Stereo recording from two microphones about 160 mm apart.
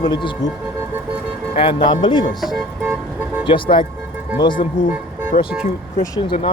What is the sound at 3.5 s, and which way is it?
Speech, 30° left (ahead or behind).